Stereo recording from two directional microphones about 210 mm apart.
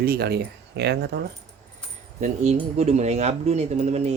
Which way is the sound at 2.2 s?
35° right (ahead or behind).